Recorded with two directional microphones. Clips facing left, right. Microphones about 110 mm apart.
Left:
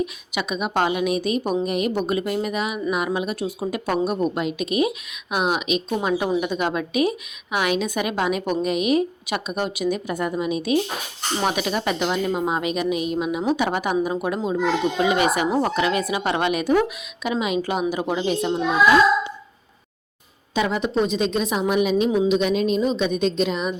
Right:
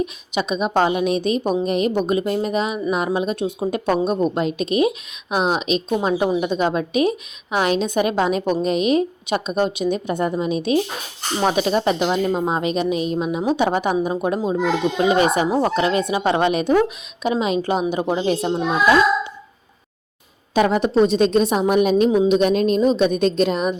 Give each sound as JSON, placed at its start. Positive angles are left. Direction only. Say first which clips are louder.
{"t": 0.0, "sound": "a woman's voice", "louder": "right 3 dB", "side_deg": -30}
{"t": 20.5, "sound": "speech", "louder": "right 5 dB", "side_deg": -45}